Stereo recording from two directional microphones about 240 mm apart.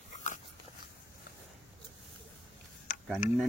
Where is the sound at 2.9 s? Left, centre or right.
Left.